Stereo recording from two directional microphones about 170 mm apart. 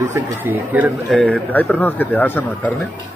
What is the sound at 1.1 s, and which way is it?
Speech, 5° left (ahead or behind).